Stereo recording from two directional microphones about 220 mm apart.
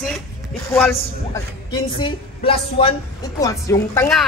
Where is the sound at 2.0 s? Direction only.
25° left (ahead or behind).